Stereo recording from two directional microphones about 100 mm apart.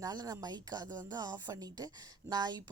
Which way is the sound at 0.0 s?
40° right (ahead or behind).